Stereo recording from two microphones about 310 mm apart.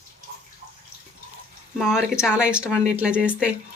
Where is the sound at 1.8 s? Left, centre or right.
Centre.